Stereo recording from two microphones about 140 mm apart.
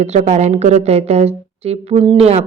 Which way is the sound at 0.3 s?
50° right (ahead or behind).